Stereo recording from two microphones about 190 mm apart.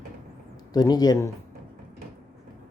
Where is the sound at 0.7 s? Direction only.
20° left (ahead or behind).